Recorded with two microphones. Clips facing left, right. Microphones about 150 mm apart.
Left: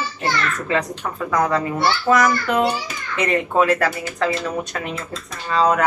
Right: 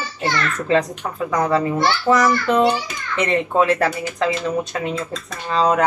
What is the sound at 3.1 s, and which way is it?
Speech, 25° right (ahead or behind).